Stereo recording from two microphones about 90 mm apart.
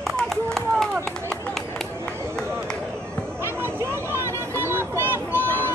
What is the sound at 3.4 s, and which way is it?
Vehicle, 25° right (ahead or behind).